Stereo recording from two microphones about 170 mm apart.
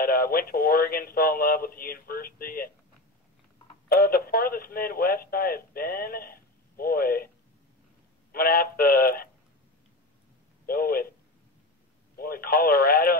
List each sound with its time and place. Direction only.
0.0 s speech: 60° left (ahead or behind)
3.9 s speech: 65° left (ahead or behind)
8.3 s speech: 60° left (ahead or behind)
10.7 s speech: 60° left (ahead or behind)
12.2 s speech: 60° left (ahead or behind)